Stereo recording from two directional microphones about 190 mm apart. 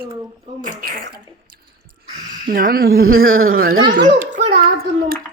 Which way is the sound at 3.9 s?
70° right (ahead or behind).